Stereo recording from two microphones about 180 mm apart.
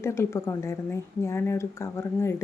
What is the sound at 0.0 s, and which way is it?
A woman's voice, 15° left (ahead or behind).